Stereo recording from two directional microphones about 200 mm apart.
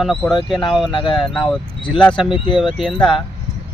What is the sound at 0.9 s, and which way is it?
Speech, 25° left (ahead or behind).